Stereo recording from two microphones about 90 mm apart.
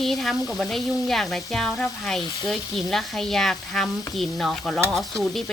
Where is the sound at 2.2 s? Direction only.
50° left (ahead or behind).